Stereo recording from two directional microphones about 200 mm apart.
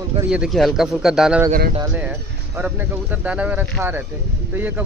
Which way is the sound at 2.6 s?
10° right (ahead or behind).